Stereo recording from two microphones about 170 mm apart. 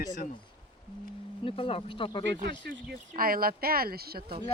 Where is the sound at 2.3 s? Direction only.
80° right.